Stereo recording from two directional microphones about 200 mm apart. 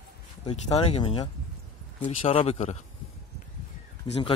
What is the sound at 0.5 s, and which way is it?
Speech, 30° left (ahead or behind).